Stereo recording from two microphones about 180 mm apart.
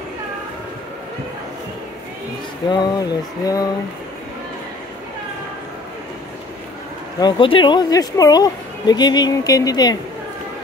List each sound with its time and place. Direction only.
2.7 s speech: 20° left (ahead or behind)
7.2 s speech: 25° left (ahead or behind)